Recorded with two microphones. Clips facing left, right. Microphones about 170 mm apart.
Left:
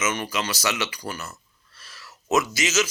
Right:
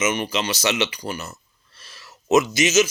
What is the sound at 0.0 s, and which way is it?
Speech, 20° right (ahead or behind).